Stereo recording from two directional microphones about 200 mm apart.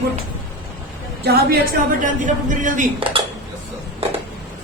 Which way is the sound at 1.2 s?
50° right (ahead or behind).